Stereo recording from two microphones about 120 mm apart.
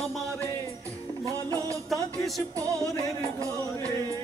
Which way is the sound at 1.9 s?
Centre (ahead or behind).